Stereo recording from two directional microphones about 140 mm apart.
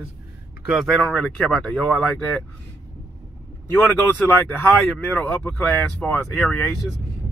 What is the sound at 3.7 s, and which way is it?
Speech, 20° left (ahead or behind).